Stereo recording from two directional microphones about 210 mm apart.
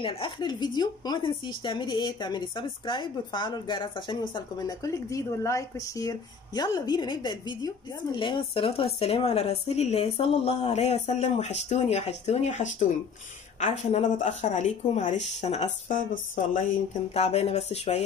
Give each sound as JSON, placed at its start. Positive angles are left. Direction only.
{"t": 0.0, "sound": "a woman's voice", "side_deg": 25}